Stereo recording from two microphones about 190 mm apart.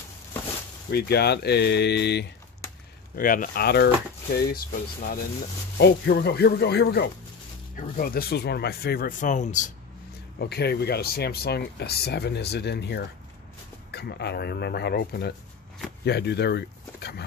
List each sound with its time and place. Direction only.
0.9 s speech: 60° left (ahead or behind)
3.2 s speech: 50° left (ahead or behind)
7.7 s speech: 40° left (ahead or behind)
10.4 s speech: 60° left (ahead or behind)
16.0 s a sound: 60° left (ahead or behind)